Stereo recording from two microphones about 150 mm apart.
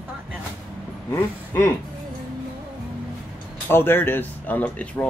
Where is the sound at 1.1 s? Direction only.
15° left (ahead or behind).